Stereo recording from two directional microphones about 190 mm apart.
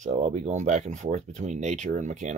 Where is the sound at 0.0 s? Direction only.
35° right (ahead or behind).